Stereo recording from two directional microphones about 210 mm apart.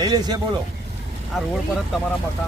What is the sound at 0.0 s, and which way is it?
Speech, 20° right (ahead or behind).